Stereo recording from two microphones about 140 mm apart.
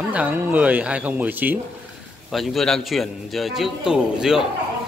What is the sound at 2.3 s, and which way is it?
A man's voice, centre (ahead or behind).